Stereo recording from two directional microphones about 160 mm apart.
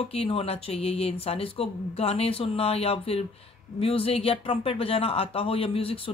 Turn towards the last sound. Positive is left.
turn(degrees=35)  # may be behind; listen again after turning